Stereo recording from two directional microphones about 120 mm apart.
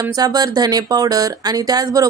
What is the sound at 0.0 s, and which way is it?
Speech, 35° right (ahead or behind).